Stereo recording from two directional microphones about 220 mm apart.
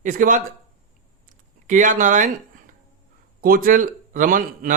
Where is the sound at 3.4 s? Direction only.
40° right (ahead or behind).